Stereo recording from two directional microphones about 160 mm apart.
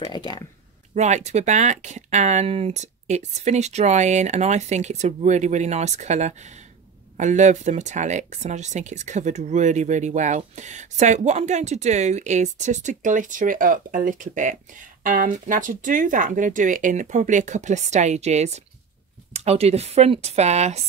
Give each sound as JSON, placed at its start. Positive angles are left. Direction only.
{"t": 0.0, "sound": "speech", "side_deg": 25}
{"t": 0.9, "sound": "speech", "side_deg": -45}